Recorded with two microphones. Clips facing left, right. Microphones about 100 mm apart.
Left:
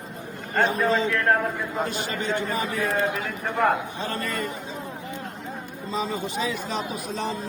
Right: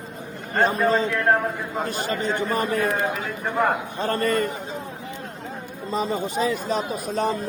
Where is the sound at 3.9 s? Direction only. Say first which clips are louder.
Right 7 dB; 50° right (ahead or behind).